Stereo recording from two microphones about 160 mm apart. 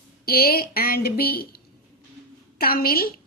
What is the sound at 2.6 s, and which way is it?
Speech, 70° left (ahead or behind).